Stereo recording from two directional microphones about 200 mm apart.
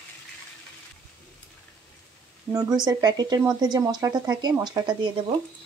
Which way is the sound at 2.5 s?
20° right (ahead or behind).